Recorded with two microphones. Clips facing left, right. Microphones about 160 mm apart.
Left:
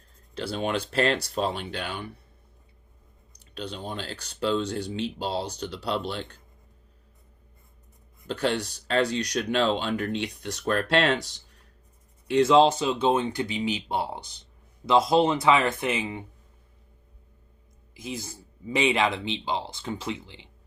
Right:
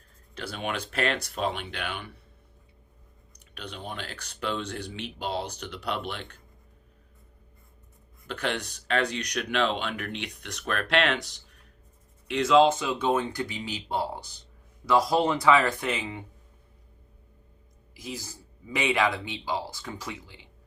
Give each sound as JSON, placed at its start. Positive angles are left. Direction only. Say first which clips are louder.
{"t": 0.3, "sound": "speech", "louder": "left 5 dB", "side_deg": 30}
{"t": 3.5, "sound": "speech", "louder": "left 4 dB", "side_deg": 30}
{"t": 8.3, "sound": "speech", "louder": "left 4 dB", "side_deg": 30}
{"t": 12.3, "sound": "speech", "louder": "left 2 dB", "side_deg": 30}
{"t": 17.9, "sound": "speech", "louder": "left 3 dB", "side_deg": 25}